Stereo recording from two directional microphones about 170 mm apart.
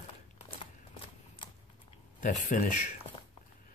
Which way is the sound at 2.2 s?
50° left (ahead or behind).